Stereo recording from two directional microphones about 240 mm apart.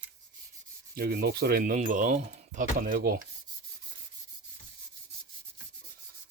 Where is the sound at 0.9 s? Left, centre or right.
Right.